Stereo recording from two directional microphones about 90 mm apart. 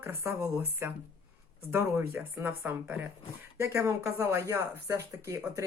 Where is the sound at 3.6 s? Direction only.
30° right (ahead or behind).